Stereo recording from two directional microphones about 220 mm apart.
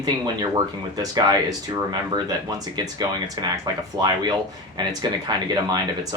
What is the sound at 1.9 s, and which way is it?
Speech, 20° right (ahead or behind).